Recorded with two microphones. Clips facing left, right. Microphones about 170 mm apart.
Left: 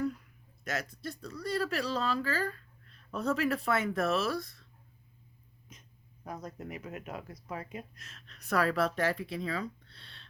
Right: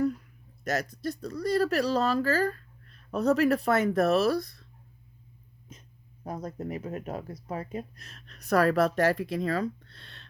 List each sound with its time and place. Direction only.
0.6 s speech: 40° right (ahead or behind)
6.2 s speech: 30° right (ahead or behind); by 10.2 s 45° right (ahead or behind)